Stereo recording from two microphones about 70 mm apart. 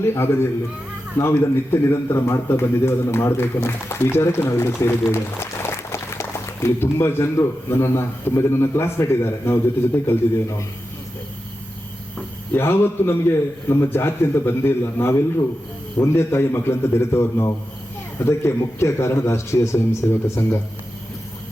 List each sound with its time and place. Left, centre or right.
0.0 s speech: left
12.5 s speech: left